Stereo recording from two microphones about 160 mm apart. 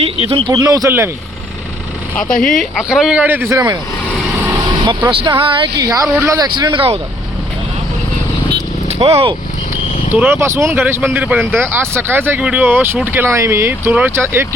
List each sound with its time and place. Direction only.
0.0 s speech: 35° right (ahead or behind)
0.5 s speech: 20° right (ahead or behind)
2.4 s speech: 5° left (ahead or behind); by 3.8 s 15° right (ahead or behind)
5.2 s speech: 30° right (ahead or behind)
8.9 s speech: 40° right (ahead or behind)
10.1 s speech: 10° right (ahead or behind)